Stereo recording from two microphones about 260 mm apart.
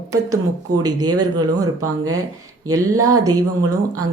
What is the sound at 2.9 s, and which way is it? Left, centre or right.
Speech, right.